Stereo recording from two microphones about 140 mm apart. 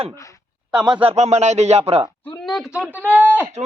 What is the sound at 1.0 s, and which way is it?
A man's voice, 50° right (ahead or behind).